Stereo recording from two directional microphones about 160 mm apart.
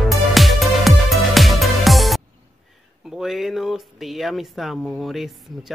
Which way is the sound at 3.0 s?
Centre (ahead or behind).